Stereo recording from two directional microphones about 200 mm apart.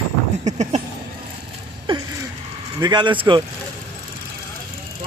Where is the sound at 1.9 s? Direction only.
25° right (ahead or behind).